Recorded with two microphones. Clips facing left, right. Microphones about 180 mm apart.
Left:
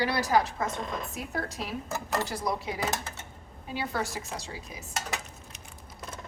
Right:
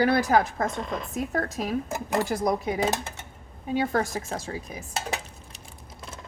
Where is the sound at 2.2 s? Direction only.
50° right (ahead or behind).